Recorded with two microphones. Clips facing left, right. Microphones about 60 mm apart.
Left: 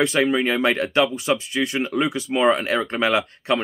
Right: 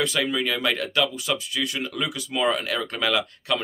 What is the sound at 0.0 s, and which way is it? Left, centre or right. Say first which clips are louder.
Speech: left 5 dB; left.